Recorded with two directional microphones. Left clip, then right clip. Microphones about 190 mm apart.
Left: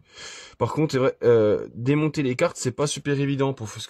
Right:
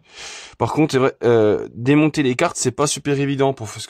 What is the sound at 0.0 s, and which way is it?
Speech, 35° right (ahead or behind).